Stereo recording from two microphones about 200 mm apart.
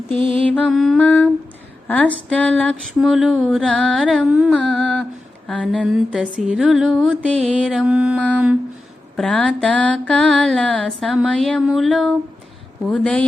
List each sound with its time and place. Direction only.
0.2 s mantra: 25° right (ahead or behind)
0.5 s mantra: centre (ahead or behind)
1.9 s a sound: 10° left (ahead or behind)